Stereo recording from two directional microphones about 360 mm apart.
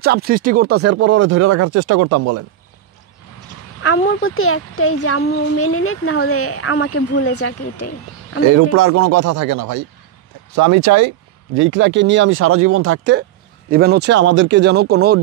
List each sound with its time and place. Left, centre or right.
0.0 s speech: right
3.8 s speech: left
8.5 s speech: right